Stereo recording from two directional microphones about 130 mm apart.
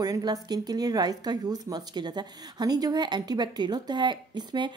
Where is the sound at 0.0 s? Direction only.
30° right (ahead or behind).